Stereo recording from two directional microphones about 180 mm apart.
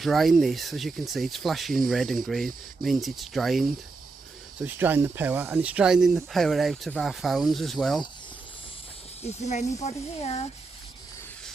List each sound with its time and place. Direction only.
0.0 s speech: centre (ahead or behind)
9.2 s speech: 40° left (ahead or behind)